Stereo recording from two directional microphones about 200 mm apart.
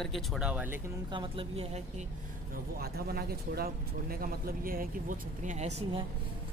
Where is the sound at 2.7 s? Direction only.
50° right (ahead or behind).